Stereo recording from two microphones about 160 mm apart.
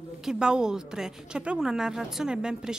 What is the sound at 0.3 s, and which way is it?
A woman's voice, 5° right (ahead or behind).